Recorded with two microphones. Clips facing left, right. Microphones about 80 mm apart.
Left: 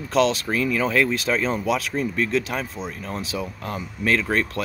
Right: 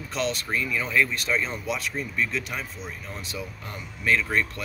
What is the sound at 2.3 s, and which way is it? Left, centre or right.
Speech, left.